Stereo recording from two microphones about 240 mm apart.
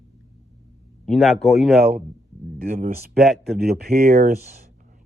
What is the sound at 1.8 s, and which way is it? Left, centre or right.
Speech, right.